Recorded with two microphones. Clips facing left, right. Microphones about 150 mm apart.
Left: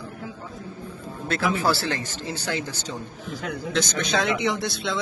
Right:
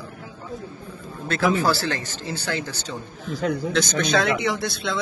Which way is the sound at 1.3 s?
20° left (ahead or behind).